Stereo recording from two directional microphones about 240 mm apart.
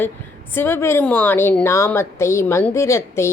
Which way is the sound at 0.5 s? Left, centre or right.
Centre.